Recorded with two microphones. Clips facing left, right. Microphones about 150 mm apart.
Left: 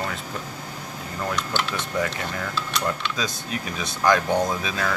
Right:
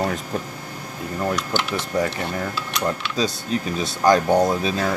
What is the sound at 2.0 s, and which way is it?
Speech, 35° right (ahead or behind).